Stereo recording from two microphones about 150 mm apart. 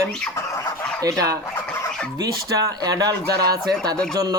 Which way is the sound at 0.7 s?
5° left (ahead or behind).